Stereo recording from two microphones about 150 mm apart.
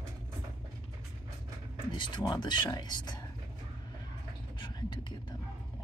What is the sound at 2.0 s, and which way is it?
Speech, 30° left (ahead or behind).